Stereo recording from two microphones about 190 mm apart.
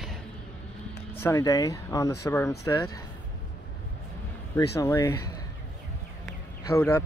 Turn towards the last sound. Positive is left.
turn(degrees=15)  # may be behind; listen again after turning